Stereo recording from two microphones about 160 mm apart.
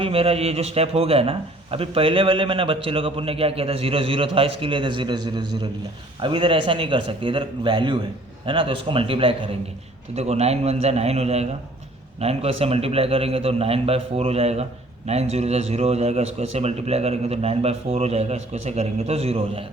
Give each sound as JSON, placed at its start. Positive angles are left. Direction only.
{"t": 0.0, "sound": "a man's voice", "side_deg": -35}